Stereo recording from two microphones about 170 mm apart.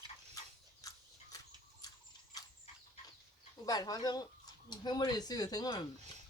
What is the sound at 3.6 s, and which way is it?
Speech, 20° left (ahead or behind).